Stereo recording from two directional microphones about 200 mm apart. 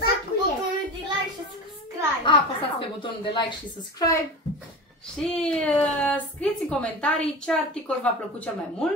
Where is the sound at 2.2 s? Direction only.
25° left (ahead or behind).